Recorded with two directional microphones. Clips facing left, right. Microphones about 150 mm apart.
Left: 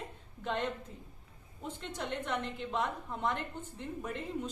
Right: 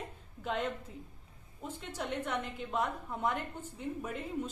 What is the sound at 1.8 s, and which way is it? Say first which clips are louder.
A woman's voice: right 1 dB; 5° right (ahead or behind).